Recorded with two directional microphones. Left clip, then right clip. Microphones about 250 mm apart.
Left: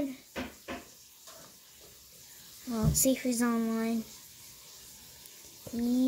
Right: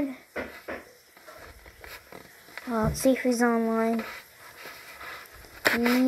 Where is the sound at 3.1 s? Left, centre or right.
Left.